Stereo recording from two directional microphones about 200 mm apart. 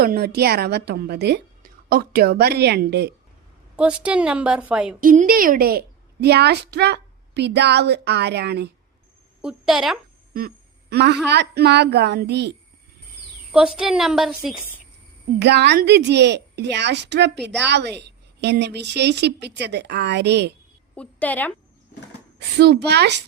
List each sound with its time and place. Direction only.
0.0 s a woman's voice: 50° right (ahead or behind)
3.8 s a woman's voice: 5° right (ahead or behind)
4.9 s a woman's voice: 45° right (ahead or behind)
9.4 s a woman's voice: 5° right (ahead or behind)
10.3 s a sound: 50° right (ahead or behind)
11.3 s a woman's voice: 55° right (ahead or behind)
13.5 s a woman's voice: 5° right (ahead or behind)
15.4 s a woman's voice: 55° right (ahead or behind)
20.9 s a woman's voice: 5° left (ahead or behind)
22.4 s a woman's voice: 55° right (ahead or behind)